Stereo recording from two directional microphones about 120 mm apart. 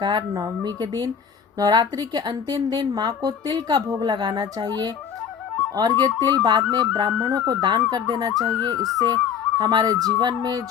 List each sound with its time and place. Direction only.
0.0 s a woman's voice: 40° right (ahead or behind)
3.8 s speech: 25° right (ahead or behind)
4.1 s a woman's voice: 35° right (ahead or behind)